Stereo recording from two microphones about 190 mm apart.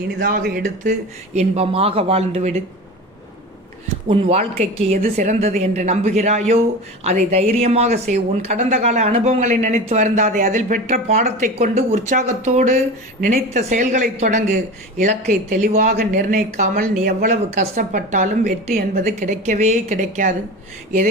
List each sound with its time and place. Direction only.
0.2 s speech: 55° right (ahead or behind); by 2.5 s 30° right (ahead or behind)
4.1 s a woman's voice: 30° right (ahead or behind)